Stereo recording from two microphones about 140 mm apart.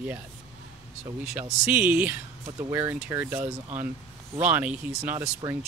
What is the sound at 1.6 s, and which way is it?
Speech, 10° right (ahead or behind).